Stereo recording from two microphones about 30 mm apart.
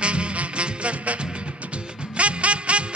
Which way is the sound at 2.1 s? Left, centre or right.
Right.